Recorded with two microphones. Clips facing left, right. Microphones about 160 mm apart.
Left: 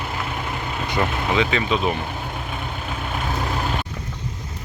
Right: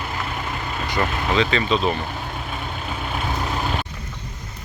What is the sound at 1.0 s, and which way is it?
Speech, 10° left (ahead or behind).